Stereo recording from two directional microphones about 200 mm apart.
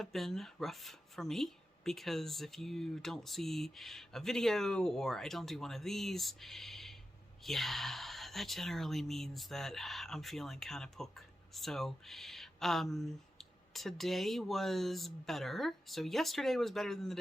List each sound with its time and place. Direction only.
0.0 s speech: centre (ahead or behind)